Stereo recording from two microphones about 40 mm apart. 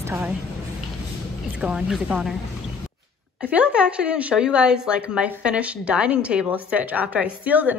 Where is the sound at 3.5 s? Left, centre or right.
Right.